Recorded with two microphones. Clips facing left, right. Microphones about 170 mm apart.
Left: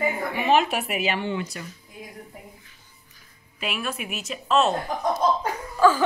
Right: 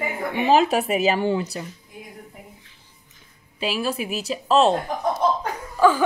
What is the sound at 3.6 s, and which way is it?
Speech, 30° right (ahead or behind).